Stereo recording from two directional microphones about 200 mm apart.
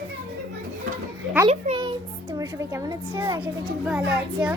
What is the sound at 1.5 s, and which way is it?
A child's voice, 30° right (ahead or behind).